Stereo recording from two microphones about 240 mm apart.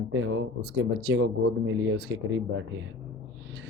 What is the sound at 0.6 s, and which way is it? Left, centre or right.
Speech, right.